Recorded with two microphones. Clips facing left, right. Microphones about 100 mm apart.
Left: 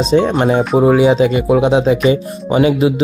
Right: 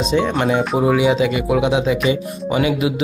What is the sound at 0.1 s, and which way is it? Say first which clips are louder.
Speech: left 5 dB; 35° left (ahead or behind).